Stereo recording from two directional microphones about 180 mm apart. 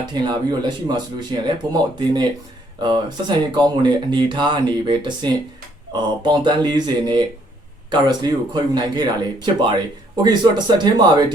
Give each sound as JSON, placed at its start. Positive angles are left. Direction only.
{"t": 0.0, "sound": "speech", "side_deg": -25}